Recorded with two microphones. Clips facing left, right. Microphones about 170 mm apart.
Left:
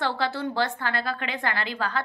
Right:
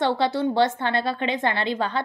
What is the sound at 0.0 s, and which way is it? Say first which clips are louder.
A woman's voice: right 5 dB; 20° right (ahead or behind).